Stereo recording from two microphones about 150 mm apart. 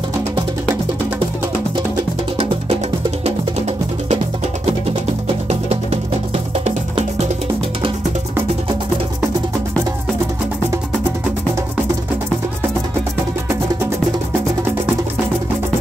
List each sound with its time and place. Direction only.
3.3 s music: 45° right (ahead or behind)
5.5 s music: 45° right (ahead or behind)